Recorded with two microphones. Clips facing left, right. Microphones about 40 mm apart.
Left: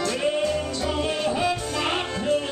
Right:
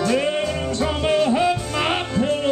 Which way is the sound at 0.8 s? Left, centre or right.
Right.